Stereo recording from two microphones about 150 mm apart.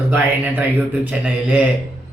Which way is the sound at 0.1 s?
10° right (ahead or behind).